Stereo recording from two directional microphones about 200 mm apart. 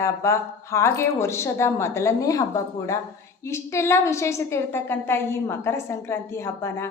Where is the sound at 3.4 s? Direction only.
15° left (ahead or behind).